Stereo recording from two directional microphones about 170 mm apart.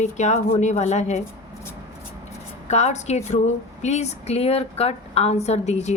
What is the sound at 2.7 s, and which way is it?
Speech, 40° left (ahead or behind).